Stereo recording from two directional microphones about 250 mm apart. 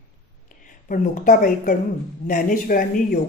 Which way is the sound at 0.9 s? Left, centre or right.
Left.